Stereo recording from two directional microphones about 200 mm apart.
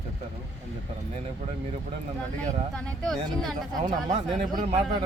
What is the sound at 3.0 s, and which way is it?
Speech, centre (ahead or behind).